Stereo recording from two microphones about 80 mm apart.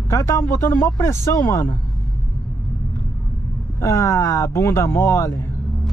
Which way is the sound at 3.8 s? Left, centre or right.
Left.